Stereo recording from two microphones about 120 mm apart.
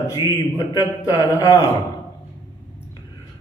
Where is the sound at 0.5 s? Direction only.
30° left (ahead or behind).